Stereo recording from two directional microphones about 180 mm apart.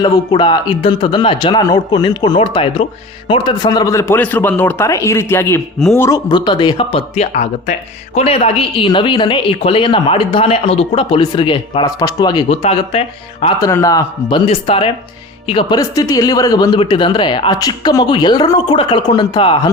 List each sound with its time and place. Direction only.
0.0 s a man's voice: 25° left (ahead or behind)
13.6 s speech: 20° left (ahead or behind)